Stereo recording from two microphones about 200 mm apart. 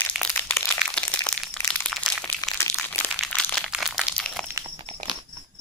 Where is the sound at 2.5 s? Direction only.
5° left (ahead or behind).